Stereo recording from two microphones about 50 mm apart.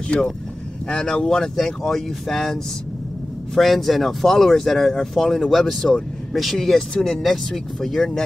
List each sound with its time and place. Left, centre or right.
0.1 s speech: left
0.8 s speech: centre